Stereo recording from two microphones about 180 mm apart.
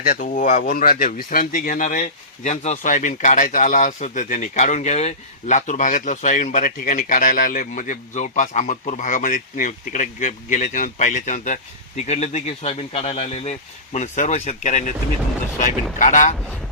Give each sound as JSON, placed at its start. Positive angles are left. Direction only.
{"t": 0.0, "sound": "speech", "side_deg": 50}